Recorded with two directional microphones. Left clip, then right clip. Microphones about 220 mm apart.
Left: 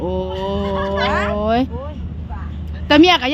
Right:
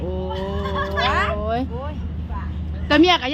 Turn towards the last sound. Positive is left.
turn(degrees=45)  # may be behind; listen again after turning